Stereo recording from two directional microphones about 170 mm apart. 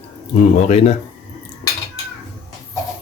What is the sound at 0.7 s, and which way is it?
Speech, 40° left (ahead or behind).